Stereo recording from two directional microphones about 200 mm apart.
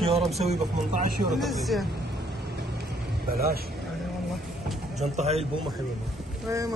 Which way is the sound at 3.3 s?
50° right (ahead or behind).